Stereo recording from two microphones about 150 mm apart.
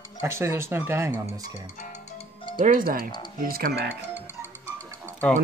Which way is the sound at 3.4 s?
85° right.